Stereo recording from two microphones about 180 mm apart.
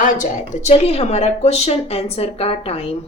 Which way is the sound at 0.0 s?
40° left (ahead or behind).